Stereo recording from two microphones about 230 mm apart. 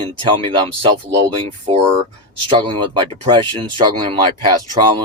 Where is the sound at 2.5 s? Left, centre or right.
Right.